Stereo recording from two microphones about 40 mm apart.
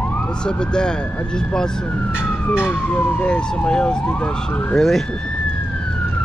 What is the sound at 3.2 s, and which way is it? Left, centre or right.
Speech, left.